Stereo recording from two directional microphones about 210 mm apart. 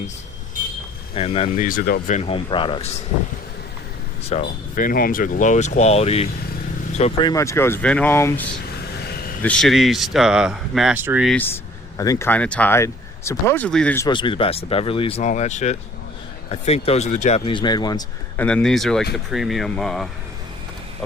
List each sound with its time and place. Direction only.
1.1 s speech: 25° left (ahead or behind)
1.6 s speech: 45° left (ahead or behind); by 3.0 s 25° left (ahead or behind)
4.3 s speech: 35° left (ahead or behind)
7.3 s speech: 15° left (ahead or behind); by 11.3 s 10° right (ahead or behind)
11.3 s speech: 10° left (ahead or behind)
14.1 s speech: 25° left (ahead or behind)
18.3 s speech: 5° left (ahead or behind)